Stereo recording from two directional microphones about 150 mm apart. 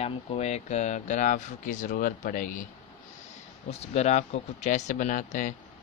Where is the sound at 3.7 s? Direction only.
50° left (ahead or behind).